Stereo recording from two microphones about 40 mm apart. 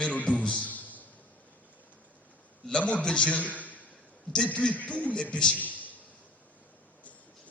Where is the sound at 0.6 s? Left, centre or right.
Left.